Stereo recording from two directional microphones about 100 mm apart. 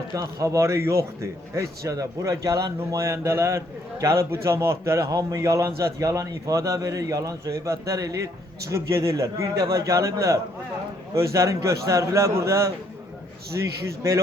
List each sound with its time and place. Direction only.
0.1 s a man's voice: 35° right (ahead or behind)